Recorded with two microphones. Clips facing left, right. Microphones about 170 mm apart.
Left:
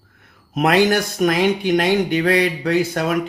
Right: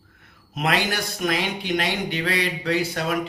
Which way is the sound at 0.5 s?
50° left (ahead or behind).